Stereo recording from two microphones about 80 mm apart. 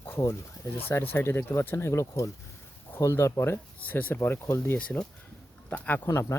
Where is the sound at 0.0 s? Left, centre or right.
Left.